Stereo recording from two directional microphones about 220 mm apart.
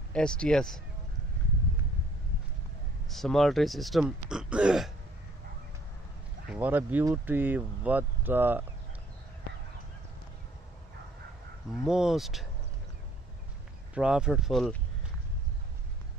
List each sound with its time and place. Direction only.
0.1 s speech: 5° left (ahead or behind)
3.1 s speech: centre (ahead or behind)
6.5 s speech: 5° right (ahead or behind)
11.8 s speech: centre (ahead or behind)
13.9 s speech: 5° right (ahead or behind)